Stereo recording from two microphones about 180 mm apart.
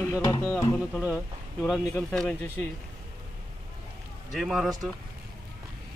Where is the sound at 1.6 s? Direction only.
5° left (ahead or behind).